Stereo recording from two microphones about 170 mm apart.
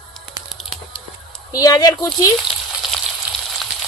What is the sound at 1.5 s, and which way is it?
Speech, 20° left (ahead or behind).